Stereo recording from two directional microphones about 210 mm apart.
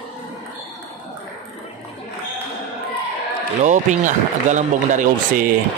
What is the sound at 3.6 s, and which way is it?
Speech, 35° right (ahead or behind).